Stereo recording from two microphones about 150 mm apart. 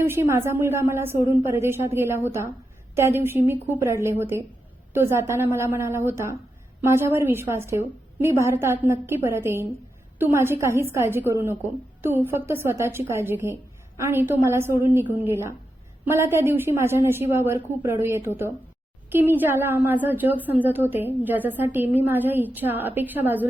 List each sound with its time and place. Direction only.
0.0 s a woman's voice: 15° right (ahead or behind)